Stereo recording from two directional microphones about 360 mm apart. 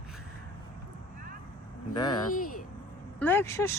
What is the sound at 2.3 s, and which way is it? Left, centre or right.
Speech, left.